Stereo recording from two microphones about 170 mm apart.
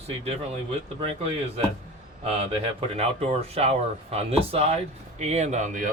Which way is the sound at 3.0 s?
35° right (ahead or behind).